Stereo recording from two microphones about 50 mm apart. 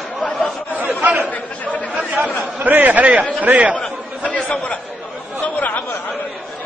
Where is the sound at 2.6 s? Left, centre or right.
Right.